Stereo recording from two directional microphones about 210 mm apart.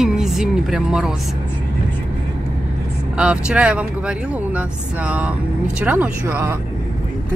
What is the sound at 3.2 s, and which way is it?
Speech, 5° right (ahead or behind).